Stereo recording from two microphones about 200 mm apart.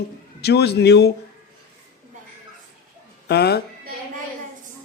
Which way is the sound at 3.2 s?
55° left (ahead or behind).